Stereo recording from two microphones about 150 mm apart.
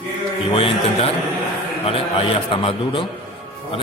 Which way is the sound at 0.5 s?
40° left (ahead or behind).